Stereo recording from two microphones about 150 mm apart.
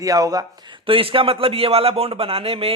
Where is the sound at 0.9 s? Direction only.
40° right (ahead or behind).